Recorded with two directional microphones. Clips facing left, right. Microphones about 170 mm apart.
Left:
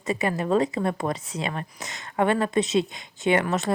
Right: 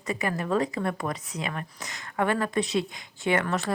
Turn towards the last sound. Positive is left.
turn(degrees=20)  # may be behind; listen again after turning